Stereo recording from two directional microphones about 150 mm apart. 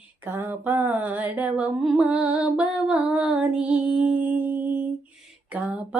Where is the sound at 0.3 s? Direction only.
15° right (ahead or behind).